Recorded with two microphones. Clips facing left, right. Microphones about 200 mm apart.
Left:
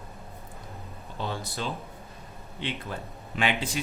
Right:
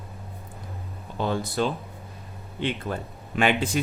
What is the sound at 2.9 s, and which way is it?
Speech, 50° right (ahead or behind).